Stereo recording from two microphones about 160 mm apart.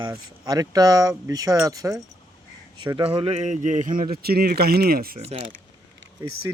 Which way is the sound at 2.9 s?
35° right (ahead or behind).